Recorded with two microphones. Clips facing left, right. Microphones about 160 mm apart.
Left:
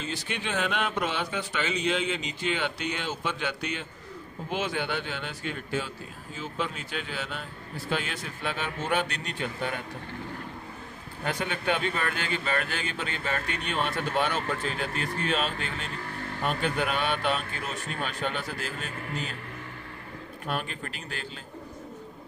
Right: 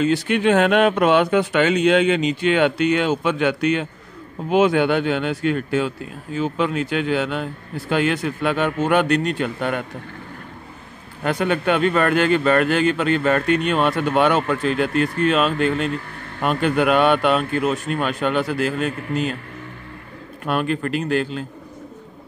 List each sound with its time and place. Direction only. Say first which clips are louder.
0.0 s a man's voice: right 16 dB; 60° right (ahead or behind)
11.2 s a man's voice: right 9 dB; 65° right (ahead or behind)
20.4 s a man's voice: right 12 dB; 70° right (ahead or behind)